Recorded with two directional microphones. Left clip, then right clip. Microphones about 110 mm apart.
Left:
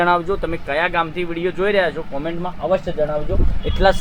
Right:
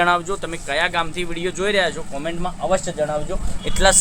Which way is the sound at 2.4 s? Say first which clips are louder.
Left 1 dB; 35° left (ahead or behind).